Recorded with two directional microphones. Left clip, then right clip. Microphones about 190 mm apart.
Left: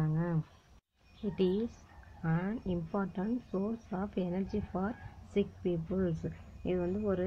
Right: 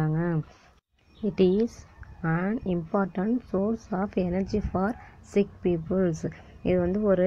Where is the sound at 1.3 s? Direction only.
40° right (ahead or behind).